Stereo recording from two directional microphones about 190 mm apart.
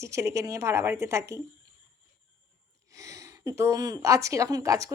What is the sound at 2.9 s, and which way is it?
Speech, 15° right (ahead or behind).